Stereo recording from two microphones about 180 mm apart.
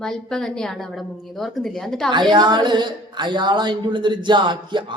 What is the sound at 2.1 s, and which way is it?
Speech, 25° right (ahead or behind).